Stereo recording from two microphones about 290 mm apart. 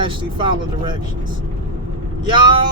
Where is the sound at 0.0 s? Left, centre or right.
Centre.